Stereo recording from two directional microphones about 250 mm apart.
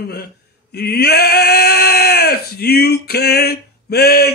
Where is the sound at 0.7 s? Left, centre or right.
Left.